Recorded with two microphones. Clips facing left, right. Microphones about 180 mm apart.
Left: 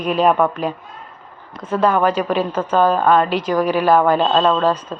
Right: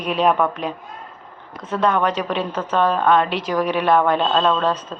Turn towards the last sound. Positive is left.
turn(degrees=5)  # may be behind; listen again after turning